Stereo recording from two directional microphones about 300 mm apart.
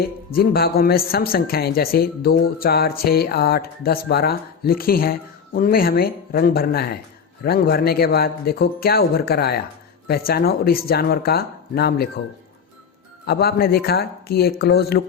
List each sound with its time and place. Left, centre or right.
0.3 s speech: left
13.2 s speech: left